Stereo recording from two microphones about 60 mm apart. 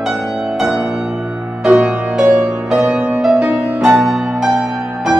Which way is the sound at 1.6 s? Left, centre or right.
Centre.